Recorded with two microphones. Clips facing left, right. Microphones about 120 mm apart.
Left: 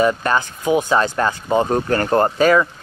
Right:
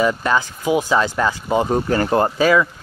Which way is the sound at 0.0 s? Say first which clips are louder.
Left 1 dB; 50° left (ahead or behind).